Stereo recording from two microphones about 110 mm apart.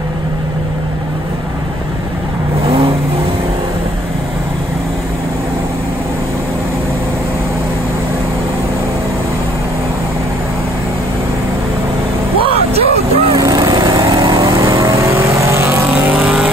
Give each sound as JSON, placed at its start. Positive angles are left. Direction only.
{"t": 12.4, "sound": "vehicle", "side_deg": -60}
{"t": 13.4, "sound": "vehicle", "side_deg": -30}